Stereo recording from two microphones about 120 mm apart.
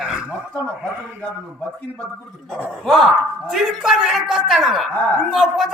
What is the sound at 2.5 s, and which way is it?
Speech, 5° right (ahead or behind).